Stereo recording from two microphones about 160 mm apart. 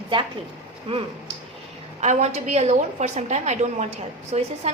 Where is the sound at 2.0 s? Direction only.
45° right (ahead or behind).